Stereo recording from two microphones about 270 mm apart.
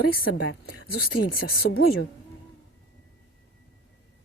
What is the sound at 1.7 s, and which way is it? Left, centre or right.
Speech, left.